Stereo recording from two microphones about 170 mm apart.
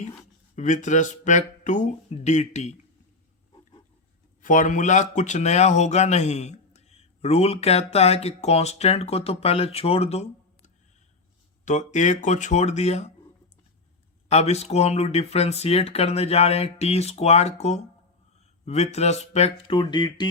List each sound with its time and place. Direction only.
0.5 s speech: 45° left (ahead or behind)
4.4 s speech: 45° left (ahead or behind)
11.6 s speech: 45° left (ahead or behind)
14.3 s speech: 40° left (ahead or behind)